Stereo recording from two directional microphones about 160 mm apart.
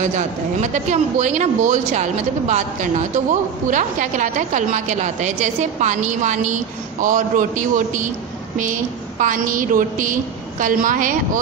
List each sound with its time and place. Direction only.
0.6 s a woman's voice: 45° right (ahead or behind)
9.2 s a man's voice: 55° right (ahead or behind)